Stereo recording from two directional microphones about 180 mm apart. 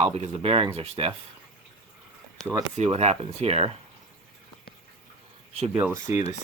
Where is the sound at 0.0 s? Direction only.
35° right (ahead or behind).